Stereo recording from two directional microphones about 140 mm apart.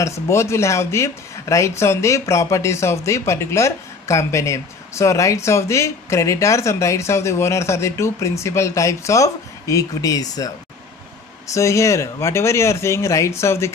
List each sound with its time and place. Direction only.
0.0 s speech: 20° left (ahead or behind)
11.4 s speech: 20° left (ahead or behind)